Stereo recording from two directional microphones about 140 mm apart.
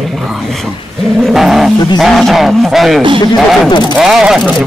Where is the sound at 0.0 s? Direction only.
Centre (ahead or behind).